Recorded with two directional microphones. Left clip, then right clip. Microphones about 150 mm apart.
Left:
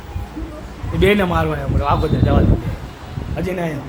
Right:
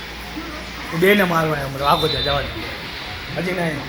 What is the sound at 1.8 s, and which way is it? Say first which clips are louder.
Speech: right 2 dB; 5° right (ahead or behind).